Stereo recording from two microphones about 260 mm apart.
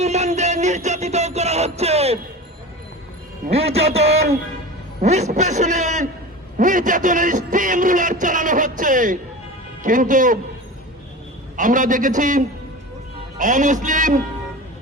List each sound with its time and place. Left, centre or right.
0.0 s music: right
3.4 s a man's voice: right
6.6 s a sound: right
9.8 s a man's voice: right
11.5 s a man's voice: right